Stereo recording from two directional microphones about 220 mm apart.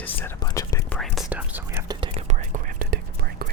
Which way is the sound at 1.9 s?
25° right (ahead or behind).